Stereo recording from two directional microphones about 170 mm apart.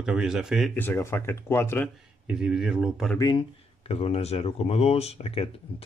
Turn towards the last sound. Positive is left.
turn(degrees=35)  # may be behind; listen again after turning